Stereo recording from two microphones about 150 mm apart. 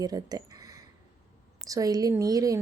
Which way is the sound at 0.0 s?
25° right (ahead or behind).